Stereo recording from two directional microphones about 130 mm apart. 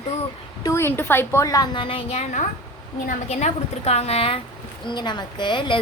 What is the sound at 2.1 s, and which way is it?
A woman's voice, 65° left (ahead or behind).